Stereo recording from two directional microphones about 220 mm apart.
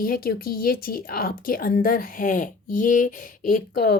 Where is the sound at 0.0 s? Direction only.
40° left (ahead or behind).